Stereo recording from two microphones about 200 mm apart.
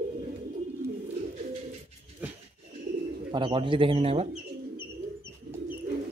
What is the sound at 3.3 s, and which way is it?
Speech, 25° right (ahead or behind).